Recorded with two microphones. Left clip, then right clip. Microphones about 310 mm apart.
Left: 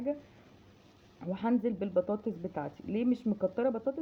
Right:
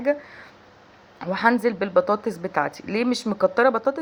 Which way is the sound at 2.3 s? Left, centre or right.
Right.